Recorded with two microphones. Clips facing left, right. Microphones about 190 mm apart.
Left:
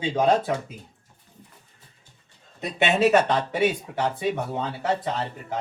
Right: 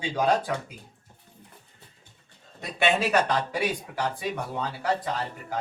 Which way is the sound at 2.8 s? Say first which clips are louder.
Left 4 dB; 20° left (ahead or behind).